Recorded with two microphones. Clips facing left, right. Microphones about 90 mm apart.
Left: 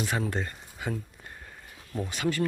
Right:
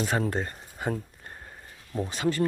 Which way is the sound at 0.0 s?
35° right (ahead or behind).